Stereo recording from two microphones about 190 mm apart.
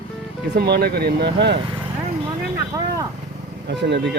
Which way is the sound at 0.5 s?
55° right (ahead or behind).